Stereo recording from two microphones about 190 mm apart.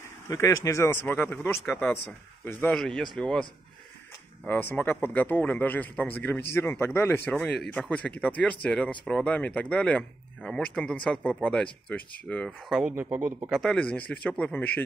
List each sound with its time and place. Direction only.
0.3 s speech: 15° left (ahead or behind)
4.5 s speech: 10° left (ahead or behind); by 13.6 s 10° right (ahead or behind)
13.6 s speech: 5° left (ahead or behind)